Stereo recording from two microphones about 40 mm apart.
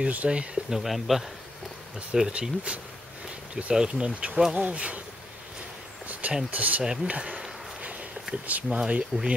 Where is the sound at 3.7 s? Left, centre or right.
Right.